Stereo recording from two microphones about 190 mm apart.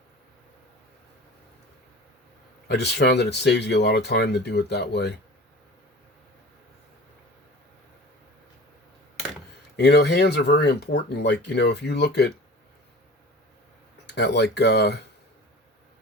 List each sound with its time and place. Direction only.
2.6 s speech: 60° left (ahead or behind)
9.7 s speech: 60° left (ahead or behind)
14.1 s speech: 65° left (ahead or behind)